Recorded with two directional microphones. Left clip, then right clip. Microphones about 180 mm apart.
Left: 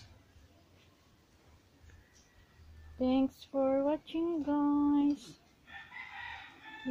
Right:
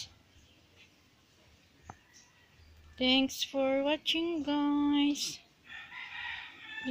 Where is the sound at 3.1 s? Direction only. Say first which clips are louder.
Right 4 dB; 10° left (ahead or behind).